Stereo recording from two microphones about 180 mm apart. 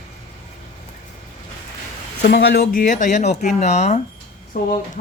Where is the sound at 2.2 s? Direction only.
65° left (ahead or behind); by 4.0 s 40° left (ahead or behind).